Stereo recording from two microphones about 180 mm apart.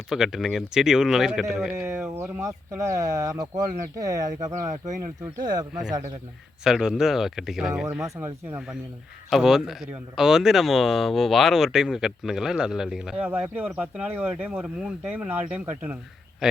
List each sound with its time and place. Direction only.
0.1 s speech: centre (ahead or behind)
1.7 s speech: 15° right (ahead or behind)
6.7 s speech: centre (ahead or behind)
8.2 s speech: 15° right (ahead or behind)
9.3 s speech: centre (ahead or behind)